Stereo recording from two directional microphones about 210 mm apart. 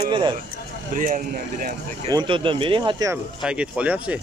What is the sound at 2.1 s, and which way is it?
Speech, 20° right (ahead or behind).